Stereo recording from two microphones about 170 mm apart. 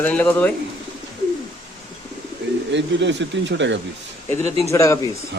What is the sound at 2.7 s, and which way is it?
Speech, 90° right.